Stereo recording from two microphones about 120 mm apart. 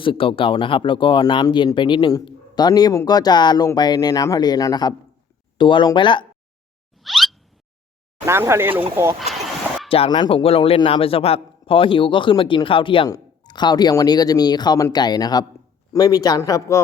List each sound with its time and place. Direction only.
0.0 s speech: 45° left (ahead or behind)
7.0 s a sound: centre (ahead or behind)
8.3 s speech: 20° right (ahead or behind)
9.2 s a sound: centre (ahead or behind)
10.1 s a man's voice: 40° left (ahead or behind)
13.1 s speech: 35° left (ahead or behind)